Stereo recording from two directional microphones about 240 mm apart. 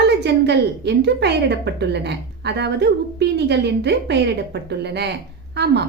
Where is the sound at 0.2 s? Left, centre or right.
Right.